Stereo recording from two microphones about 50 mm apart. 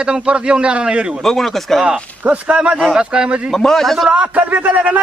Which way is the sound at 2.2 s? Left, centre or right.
Right.